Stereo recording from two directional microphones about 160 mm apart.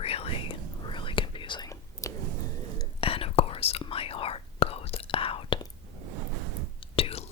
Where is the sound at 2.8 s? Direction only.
35° left (ahead or behind).